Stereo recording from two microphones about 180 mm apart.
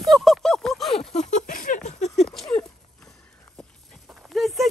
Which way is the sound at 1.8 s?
40° left (ahead or behind).